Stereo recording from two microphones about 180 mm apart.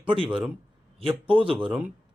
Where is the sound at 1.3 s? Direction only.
30° right (ahead or behind).